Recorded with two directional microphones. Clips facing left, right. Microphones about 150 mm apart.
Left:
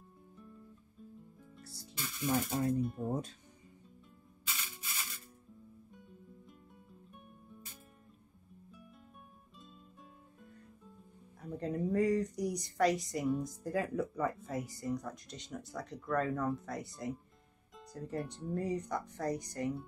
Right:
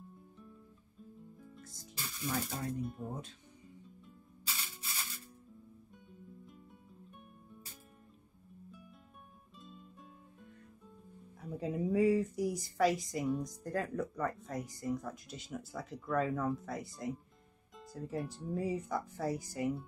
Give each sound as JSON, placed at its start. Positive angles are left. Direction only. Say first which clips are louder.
{"t": 1.6, "sound": "speech", "louder": "left 4 dB", "side_deg": 35}
{"t": 2.8, "sound": "speech", "louder": "left 4 dB", "side_deg": 0}
{"t": 11.4, "sound": "speech", "louder": "even", "side_deg": 0}